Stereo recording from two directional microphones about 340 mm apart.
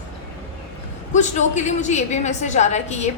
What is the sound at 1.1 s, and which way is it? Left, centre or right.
A woman's voice, left.